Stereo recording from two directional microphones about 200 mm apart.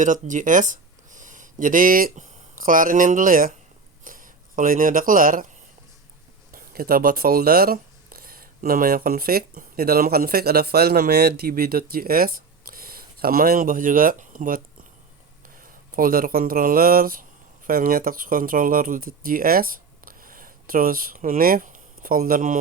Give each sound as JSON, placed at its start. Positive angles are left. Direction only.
{"t": 0.0, "sound": "speech", "side_deg": -40}
{"t": 6.5, "sound": "speech", "side_deg": -50}